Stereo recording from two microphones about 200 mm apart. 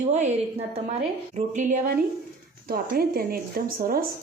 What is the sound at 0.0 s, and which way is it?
A woman's voice, 35° right (ahead or behind).